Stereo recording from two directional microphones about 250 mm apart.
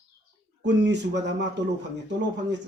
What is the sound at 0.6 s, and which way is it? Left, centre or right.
Speech, right.